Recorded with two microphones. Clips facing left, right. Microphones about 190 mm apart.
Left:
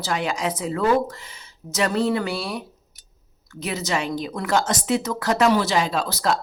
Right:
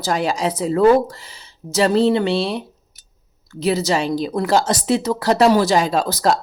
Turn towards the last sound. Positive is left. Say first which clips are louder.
# right 5 dB
turn(degrees=-40)  # may be behind; listen again after turning